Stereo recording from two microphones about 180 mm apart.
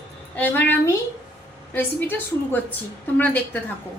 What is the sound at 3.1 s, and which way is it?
Speech, 10° left (ahead or behind).